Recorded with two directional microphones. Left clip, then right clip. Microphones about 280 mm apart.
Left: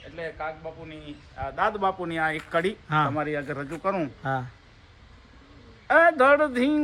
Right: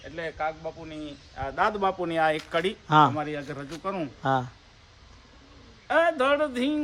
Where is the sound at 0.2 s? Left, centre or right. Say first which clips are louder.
Right 2 dB; right.